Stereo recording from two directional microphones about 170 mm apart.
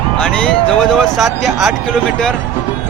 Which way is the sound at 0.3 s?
5° left (ahead or behind).